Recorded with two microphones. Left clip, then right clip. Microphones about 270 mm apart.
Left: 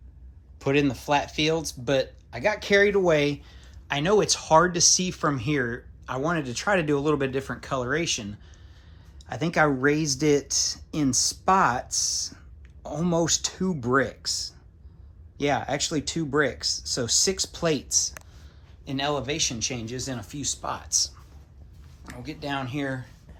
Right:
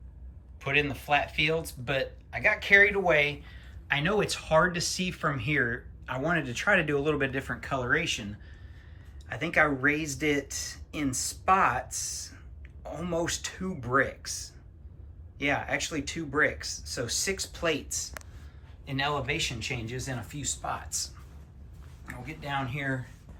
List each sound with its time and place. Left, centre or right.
0.6 s speech: centre
9.3 s speech: centre